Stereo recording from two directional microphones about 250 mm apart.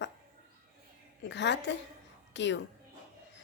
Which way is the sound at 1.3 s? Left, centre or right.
Left.